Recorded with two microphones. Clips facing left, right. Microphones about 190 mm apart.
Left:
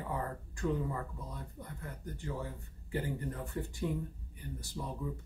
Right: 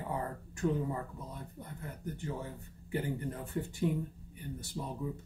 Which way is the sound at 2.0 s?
20° right (ahead or behind).